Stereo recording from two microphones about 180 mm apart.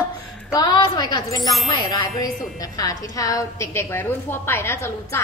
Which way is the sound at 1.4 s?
Centre (ahead or behind).